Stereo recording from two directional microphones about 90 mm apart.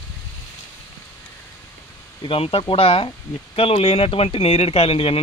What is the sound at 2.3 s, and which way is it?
Speech, 90° left.